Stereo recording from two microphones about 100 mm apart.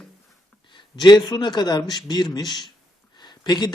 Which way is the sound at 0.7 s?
50° left (ahead or behind).